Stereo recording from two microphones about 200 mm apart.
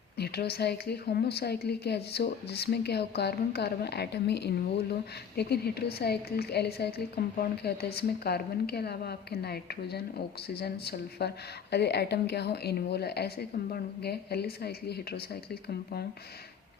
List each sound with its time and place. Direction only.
0.2 s a woman's voice: 55° left (ahead or behind)